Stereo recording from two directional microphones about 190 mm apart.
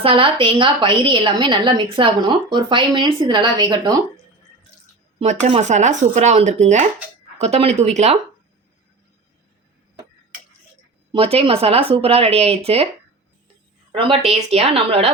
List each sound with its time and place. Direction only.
0.0 s a woman's voice: 25° right (ahead or behind)
5.2 s speech: 35° right (ahead or behind)
11.1 s speech: 30° right (ahead or behind)
13.9 s speech: 30° right (ahead or behind)